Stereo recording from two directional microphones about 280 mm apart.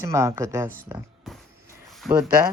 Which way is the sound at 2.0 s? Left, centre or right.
Centre.